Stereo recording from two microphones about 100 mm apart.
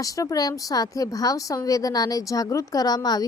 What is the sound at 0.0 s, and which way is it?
Speech, 35° left (ahead or behind).